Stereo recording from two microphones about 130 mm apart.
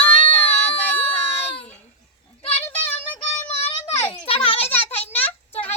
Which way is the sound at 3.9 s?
20° left (ahead or behind).